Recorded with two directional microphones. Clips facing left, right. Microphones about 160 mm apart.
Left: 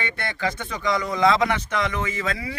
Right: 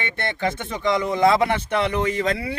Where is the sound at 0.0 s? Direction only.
25° right (ahead or behind).